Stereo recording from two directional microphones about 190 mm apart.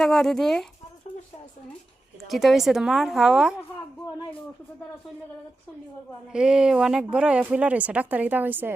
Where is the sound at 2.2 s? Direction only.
Centre (ahead or behind).